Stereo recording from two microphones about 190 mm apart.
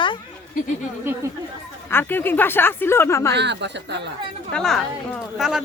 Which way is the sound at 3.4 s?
65° right (ahead or behind).